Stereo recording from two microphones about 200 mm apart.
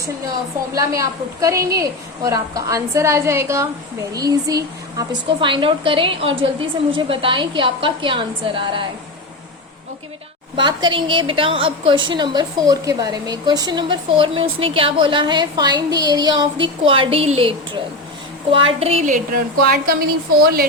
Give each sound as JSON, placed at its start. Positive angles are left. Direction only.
{"t": 0.7, "sound": "a woman's voice", "side_deg": -15}
{"t": 10.6, "sound": "a woman's voice", "side_deg": -25}